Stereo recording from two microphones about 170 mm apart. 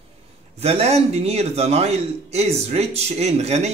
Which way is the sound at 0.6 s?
40° right (ahead or behind).